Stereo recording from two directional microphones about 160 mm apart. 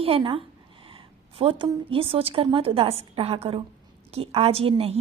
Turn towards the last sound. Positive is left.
turn(degrees=-35)  # may be behind; listen again after turning